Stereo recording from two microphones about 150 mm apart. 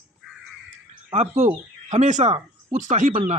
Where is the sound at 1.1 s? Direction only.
50° right (ahead or behind).